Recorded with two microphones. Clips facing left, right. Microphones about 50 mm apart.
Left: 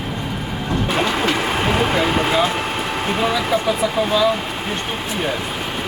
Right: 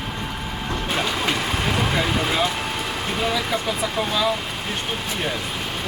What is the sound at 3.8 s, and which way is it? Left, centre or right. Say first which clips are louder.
Speech: left 5 dB; centre.